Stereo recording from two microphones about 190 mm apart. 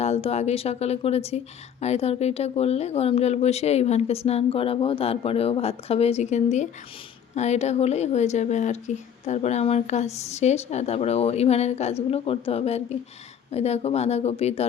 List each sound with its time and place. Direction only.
0.0 s speech: 35° left (ahead or behind)